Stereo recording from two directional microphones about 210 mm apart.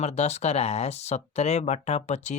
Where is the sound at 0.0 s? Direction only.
30° left (ahead or behind).